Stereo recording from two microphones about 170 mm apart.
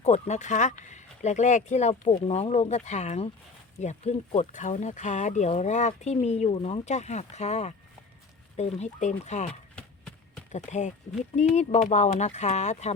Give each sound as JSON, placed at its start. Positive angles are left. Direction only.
{"t": 0.0, "sound": "speech", "side_deg": 45}